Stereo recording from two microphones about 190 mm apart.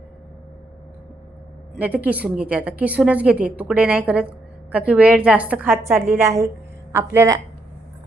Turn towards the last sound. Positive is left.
turn(degrees=-15)  # may be behind; listen again after turning